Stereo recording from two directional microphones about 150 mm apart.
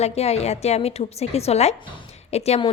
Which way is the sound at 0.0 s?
45° left (ahead or behind).